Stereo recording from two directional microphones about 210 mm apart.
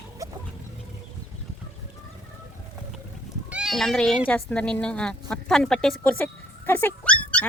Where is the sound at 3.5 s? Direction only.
Centre (ahead or behind).